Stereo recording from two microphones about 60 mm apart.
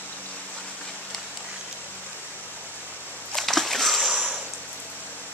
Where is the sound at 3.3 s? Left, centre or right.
Centre.